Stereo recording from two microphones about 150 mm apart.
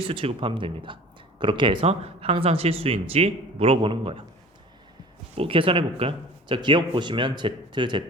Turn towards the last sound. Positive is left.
turn(degrees=-30)  # may be behind; listen again after turning